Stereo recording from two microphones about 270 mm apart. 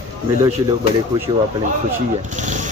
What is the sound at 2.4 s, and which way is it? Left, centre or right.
Vehicle, right.